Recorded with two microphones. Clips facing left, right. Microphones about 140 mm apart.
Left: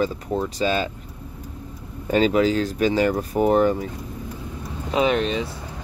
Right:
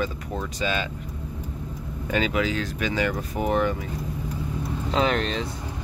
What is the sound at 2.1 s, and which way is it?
Speech, 35° left (ahead or behind).